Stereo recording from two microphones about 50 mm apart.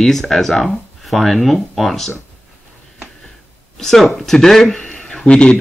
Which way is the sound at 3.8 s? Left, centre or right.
Centre.